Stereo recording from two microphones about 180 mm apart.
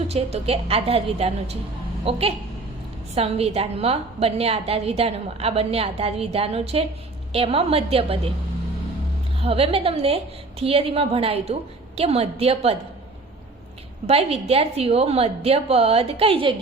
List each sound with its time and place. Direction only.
0.1 s a woman's voice: 35° right (ahead or behind)
9.4 s a woman's voice: 35° right (ahead or behind)
14.1 s a woman's voice: 35° right (ahead or behind)